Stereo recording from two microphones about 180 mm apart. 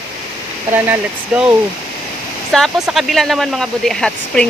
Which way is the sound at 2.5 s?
Centre (ahead or behind).